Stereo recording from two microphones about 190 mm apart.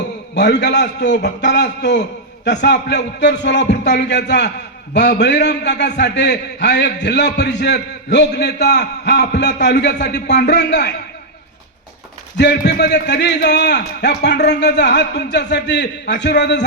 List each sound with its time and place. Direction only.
0.3 s a man's voice: 65° left (ahead or behind)
12.4 s a man's voice: 65° left (ahead or behind)